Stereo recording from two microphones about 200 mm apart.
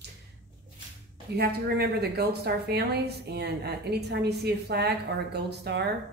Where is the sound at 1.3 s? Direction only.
50° right (ahead or behind).